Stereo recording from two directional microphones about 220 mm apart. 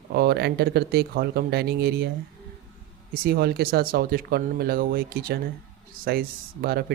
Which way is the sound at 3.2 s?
45° right (ahead or behind).